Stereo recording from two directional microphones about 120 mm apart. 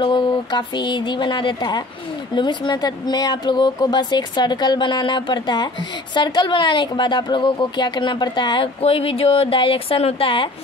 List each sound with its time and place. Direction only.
0.0 s speech: 40° left (ahead or behind)